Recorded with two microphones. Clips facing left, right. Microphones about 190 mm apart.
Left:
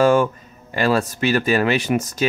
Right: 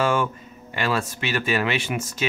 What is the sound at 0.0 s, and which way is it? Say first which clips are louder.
Speech: left 7 dB; 40° left (ahead or behind).